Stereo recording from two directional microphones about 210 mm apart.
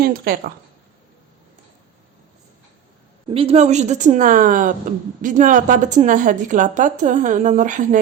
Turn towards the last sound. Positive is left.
turn(degrees=-35)  # may be behind; listen again after turning